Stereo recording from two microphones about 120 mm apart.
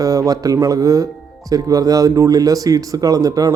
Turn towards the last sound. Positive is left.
turn(degrees=-30)  # may be behind; listen again after turning